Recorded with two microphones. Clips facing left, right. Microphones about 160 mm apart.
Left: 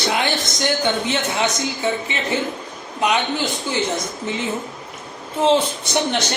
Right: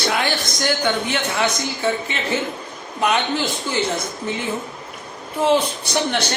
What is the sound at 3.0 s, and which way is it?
Speech, 15° left (ahead or behind).